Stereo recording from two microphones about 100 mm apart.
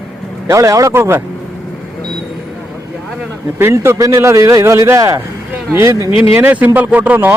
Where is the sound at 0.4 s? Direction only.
30° right (ahead or behind).